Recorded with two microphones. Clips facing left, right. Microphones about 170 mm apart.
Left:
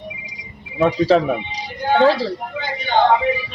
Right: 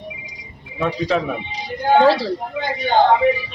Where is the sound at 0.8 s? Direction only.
35° left (ahead or behind).